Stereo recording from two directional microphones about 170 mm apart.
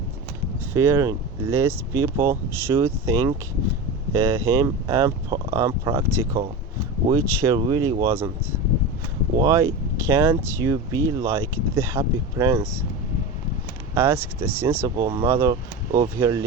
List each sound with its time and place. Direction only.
0.7 s speech: 15° right (ahead or behind)
9.5 s speech: 20° right (ahead or behind)
13.9 s speech: 15° right (ahead or behind)